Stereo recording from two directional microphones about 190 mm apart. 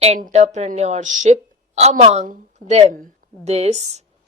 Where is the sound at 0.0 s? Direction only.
35° right (ahead or behind).